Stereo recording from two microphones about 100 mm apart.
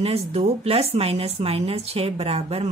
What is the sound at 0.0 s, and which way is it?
Speech, 85° right.